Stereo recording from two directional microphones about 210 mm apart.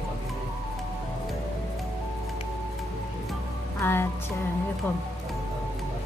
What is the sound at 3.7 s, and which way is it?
Music, 10° left (ahead or behind).